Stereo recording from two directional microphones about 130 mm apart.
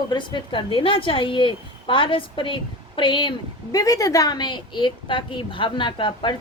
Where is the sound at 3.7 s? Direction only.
25° left (ahead or behind).